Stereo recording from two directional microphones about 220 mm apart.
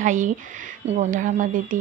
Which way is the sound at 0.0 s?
35° right (ahead or behind).